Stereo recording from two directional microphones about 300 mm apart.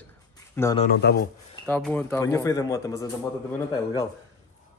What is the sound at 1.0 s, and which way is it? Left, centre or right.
Speech, left.